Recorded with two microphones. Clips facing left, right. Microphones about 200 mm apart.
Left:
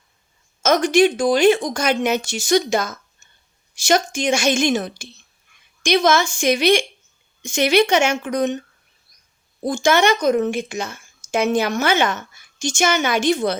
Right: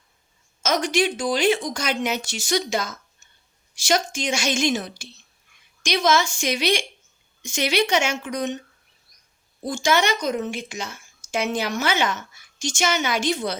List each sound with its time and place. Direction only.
0.6 s speech: 50° left (ahead or behind)
9.6 s speech: 50° left (ahead or behind)